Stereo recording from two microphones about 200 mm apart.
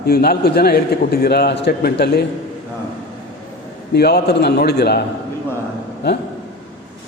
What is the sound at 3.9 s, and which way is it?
A man's voice, 55° left (ahead or behind).